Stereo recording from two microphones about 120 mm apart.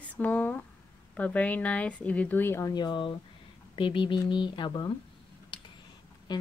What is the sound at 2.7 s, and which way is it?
Speech, 40° left (ahead or behind).